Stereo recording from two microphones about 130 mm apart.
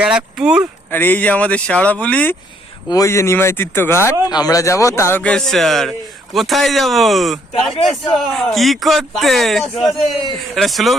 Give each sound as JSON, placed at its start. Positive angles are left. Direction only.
{"t": 0.0, "sound": "speech", "side_deg": -10}
{"t": 0.9, "sound": "speech", "side_deg": 15}
{"t": 2.9, "sound": "speech", "side_deg": 25}
{"t": 4.3, "sound": "speech", "side_deg": 30}
{"t": 5.2, "sound": "a man's voice", "side_deg": 5}